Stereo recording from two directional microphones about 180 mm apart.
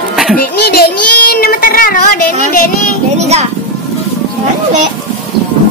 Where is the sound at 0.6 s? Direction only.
60° left (ahead or behind).